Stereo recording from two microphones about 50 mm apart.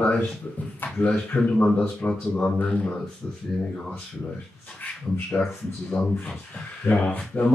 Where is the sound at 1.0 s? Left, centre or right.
Left.